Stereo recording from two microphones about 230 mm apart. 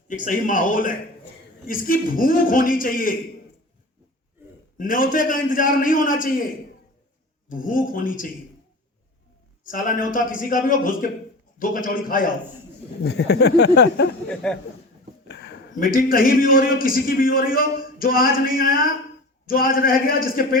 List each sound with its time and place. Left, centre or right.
0.1 s a man's voice: left
4.8 s a man's voice: left
7.5 s a man's voice: left
9.6 s a man's voice: left
13.0 s speech: left
14.3 s speech: centre
15.3 s a sound: left
15.8 s a man's voice: left